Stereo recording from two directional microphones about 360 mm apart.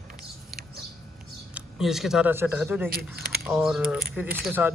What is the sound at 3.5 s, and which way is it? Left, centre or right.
Speech, centre.